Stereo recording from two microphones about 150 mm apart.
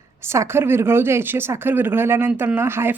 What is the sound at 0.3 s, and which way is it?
Speech, 15° right (ahead or behind).